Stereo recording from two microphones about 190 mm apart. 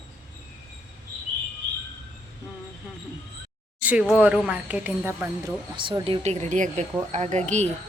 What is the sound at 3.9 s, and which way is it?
Speech, 5° right (ahead or behind).